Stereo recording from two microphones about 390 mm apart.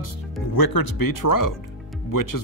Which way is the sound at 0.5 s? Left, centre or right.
Left.